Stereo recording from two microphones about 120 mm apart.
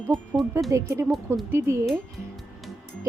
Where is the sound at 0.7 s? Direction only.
20° right (ahead or behind).